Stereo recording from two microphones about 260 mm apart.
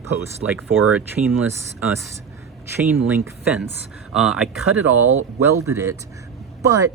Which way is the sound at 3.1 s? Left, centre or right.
Centre.